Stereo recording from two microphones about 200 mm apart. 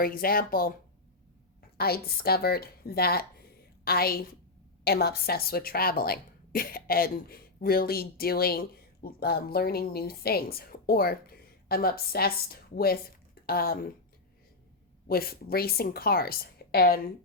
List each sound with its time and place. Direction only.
0.0 s a woman's voice: 45° left (ahead or behind)
1.8 s a woman's voice: 50° left (ahead or behind)
15.0 s a woman's voice: 50° left (ahead or behind)